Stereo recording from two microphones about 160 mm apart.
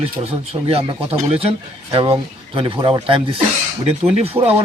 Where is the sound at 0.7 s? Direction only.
35° right (ahead or behind).